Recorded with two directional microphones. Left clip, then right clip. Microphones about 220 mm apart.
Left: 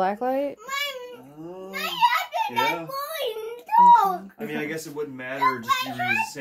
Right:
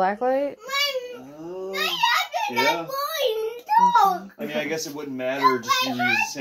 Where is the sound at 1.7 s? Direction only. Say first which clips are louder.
Even; 10° right (ahead or behind).